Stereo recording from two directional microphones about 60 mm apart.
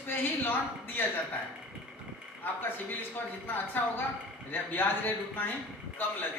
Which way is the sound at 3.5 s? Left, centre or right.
Left.